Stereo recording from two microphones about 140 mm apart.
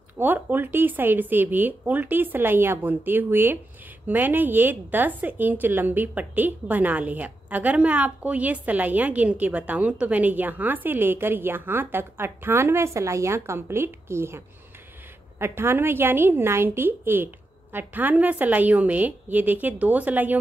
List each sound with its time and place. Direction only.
0.2 s a woman's voice: 15° right (ahead or behind)